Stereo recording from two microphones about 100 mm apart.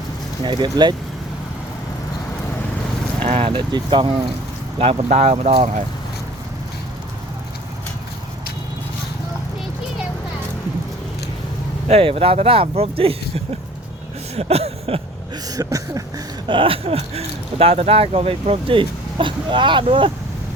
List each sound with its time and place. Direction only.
0.4 s speech: 45° right (ahead or behind)
3.2 s vehicle: 80° right
3.7 s speech: 50° right (ahead or behind)
4.8 s speech: 75° right (ahead or behind); by 5.5 s 90° right
11.9 s speech: 90° right
14.3 s speech: 90° right
15.4 s a sound: 35° right (ahead or behind)
16.5 s speech: 60° right (ahead or behind)